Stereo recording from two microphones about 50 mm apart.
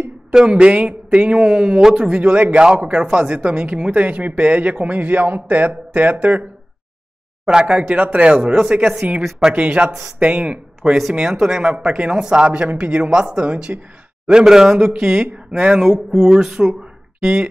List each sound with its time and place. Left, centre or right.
0.3 s speech: centre
2.0 s speech: right
7.5 s speech: right
10.8 s speech: centre
11.6 s speech: right
14.4 s speech: centre